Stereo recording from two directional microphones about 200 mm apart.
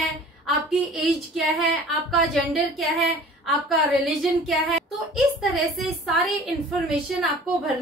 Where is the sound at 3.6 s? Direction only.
Centre (ahead or behind).